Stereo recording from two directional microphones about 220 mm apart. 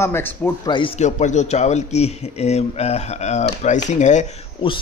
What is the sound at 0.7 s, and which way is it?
A man's voice, 25° left (ahead or behind).